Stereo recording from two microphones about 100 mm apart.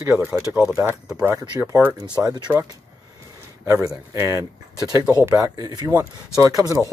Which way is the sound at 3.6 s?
35° right (ahead or behind).